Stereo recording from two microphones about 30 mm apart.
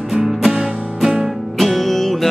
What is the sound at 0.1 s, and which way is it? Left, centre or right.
Music, centre.